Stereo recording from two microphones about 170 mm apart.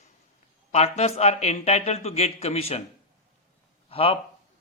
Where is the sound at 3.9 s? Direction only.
35° left (ahead or behind).